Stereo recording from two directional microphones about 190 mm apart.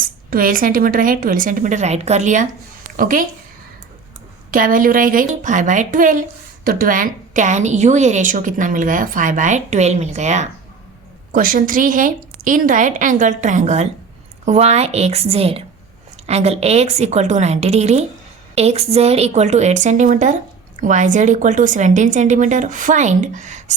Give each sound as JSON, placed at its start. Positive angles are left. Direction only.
{"t": 0.0, "sound": "a woman's voice", "side_deg": -50}
{"t": 4.5, "sound": "a woman's voice", "side_deg": -45}